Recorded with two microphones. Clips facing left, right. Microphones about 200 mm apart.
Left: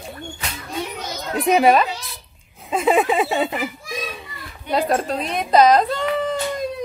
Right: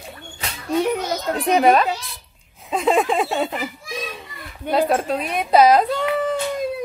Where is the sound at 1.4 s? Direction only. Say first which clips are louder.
Left 1 dB; 5° left (ahead or behind).